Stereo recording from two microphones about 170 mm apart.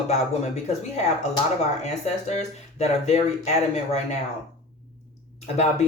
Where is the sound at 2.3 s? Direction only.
40° left (ahead or behind).